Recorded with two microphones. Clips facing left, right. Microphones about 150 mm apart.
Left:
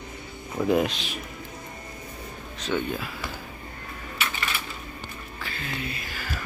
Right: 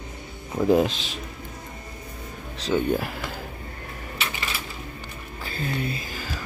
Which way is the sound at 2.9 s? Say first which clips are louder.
Right 7 dB; 55° right (ahead or behind).